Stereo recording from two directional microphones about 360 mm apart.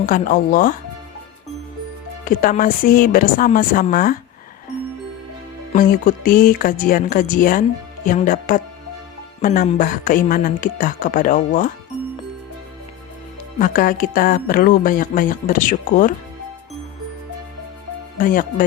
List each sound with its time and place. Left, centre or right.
0.0 s speech: left
2.2 s speech: left
5.7 s speech: left
13.6 s speech: left
18.2 s speech: left